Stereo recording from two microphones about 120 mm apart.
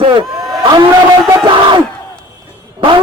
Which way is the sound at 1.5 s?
40° right (ahead or behind).